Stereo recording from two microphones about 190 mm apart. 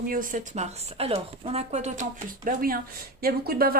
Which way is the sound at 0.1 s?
45° right (ahead or behind).